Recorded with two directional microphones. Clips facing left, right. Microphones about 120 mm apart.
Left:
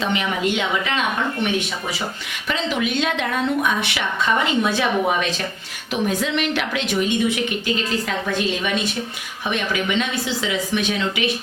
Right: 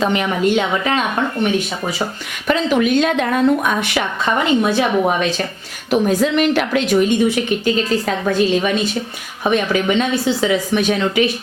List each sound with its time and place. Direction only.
0.0 s speech: 45° right (ahead or behind)
2.5 s speech: 45° right (ahead or behind)
9.4 s speech: 40° right (ahead or behind)